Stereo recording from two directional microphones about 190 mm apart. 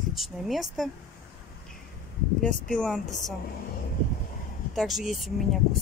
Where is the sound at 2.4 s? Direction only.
5° left (ahead or behind).